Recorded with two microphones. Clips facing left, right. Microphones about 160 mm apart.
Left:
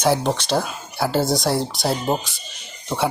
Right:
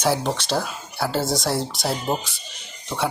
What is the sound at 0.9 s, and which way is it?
Speech, centre (ahead or behind).